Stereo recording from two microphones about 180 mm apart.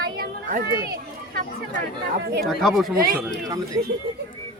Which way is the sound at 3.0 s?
55° right (ahead or behind).